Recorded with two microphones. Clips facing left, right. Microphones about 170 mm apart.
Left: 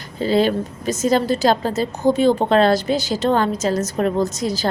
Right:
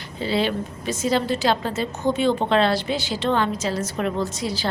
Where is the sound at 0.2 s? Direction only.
45° left (ahead or behind).